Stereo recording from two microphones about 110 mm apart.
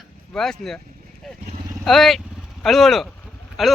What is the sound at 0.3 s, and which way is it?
Speech, 5° left (ahead or behind).